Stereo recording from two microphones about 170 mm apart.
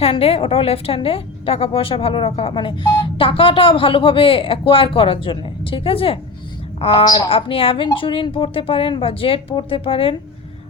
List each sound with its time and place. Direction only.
0.0 s a woman's voice: 35° left (ahead or behind)